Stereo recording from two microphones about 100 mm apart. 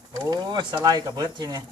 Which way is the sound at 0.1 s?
40° right (ahead or behind).